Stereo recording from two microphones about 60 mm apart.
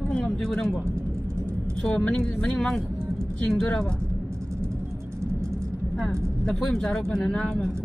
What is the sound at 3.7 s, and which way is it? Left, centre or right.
Speech, centre.